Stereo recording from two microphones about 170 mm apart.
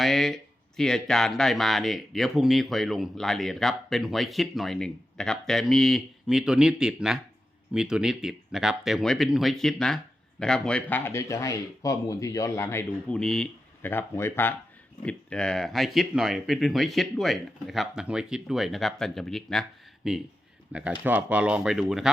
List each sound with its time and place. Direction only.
0.0 s speech: centre (ahead or behind)
13.1 s speech: 5° left (ahead or behind)